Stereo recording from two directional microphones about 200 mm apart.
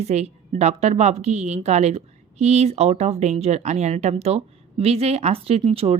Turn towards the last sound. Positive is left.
turn(degrees=-30)  # may be behind; listen again after turning